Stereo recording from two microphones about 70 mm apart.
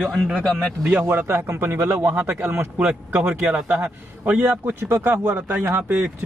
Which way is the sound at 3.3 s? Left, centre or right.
Centre.